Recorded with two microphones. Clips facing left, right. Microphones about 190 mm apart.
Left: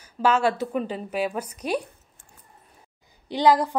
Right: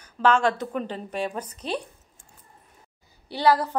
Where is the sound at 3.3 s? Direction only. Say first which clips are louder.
Left 2 dB; 15° left (ahead or behind).